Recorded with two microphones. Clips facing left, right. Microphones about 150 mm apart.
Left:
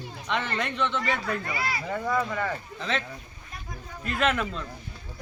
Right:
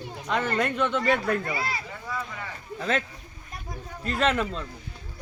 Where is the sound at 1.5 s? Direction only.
25° right (ahead or behind).